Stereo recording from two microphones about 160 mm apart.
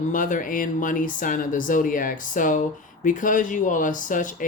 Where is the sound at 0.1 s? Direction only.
55° left (ahead or behind).